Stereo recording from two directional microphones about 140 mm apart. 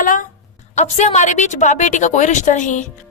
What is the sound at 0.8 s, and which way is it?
A woman's voice, 55° left (ahead or behind).